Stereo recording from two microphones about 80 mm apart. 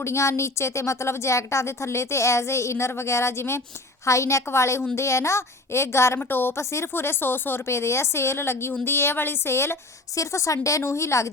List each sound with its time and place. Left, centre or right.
0.0 s a woman's voice: left